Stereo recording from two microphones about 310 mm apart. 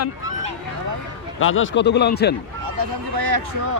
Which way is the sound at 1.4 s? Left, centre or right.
Left.